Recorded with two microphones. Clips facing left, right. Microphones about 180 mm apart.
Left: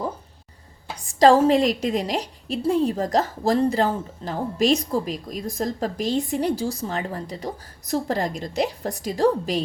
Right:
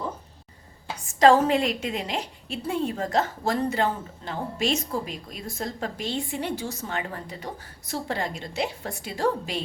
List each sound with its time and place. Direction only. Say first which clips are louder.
1.0 s a woman's voice: left 3 dB; 35° left (ahead or behind)